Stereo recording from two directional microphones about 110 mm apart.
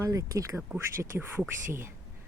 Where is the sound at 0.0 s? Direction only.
30° right (ahead or behind).